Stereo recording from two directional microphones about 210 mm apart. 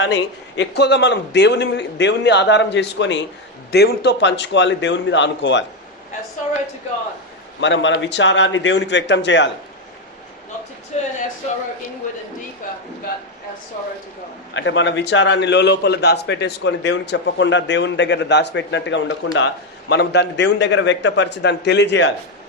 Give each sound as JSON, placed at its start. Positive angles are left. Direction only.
{"t": 0.0, "sound": "a man's voice", "side_deg": 55}
{"t": 7.6, "sound": "a man's voice", "side_deg": 60}
{"t": 10.9, "sound": "a sound", "side_deg": 30}
{"t": 14.5, "sound": "a man's voice", "side_deg": 60}